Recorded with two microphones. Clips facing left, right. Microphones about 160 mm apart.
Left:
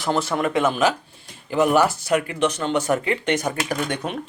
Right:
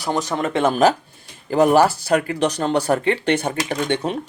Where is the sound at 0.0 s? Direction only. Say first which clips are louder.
Even; 15° right (ahead or behind).